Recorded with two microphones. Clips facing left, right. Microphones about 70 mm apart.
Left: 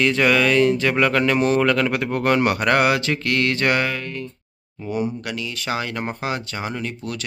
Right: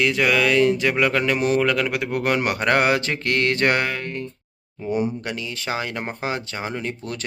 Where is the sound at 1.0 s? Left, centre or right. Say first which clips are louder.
Left 2 dB; centre.